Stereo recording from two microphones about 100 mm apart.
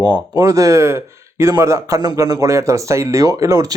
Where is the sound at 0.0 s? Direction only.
40° right (ahead or behind).